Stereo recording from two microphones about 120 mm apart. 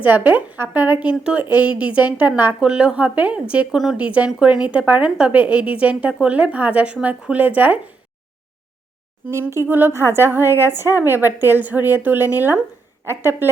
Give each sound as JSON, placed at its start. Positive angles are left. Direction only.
{"t": 0.0, "sound": "a woman's voice", "side_deg": -15}
{"t": 9.3, "sound": "a woman's voice", "side_deg": -20}